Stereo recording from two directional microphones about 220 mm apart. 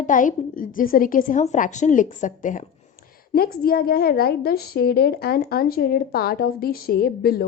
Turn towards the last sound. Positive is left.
turn(degrees=45)  # may be behind; listen again after turning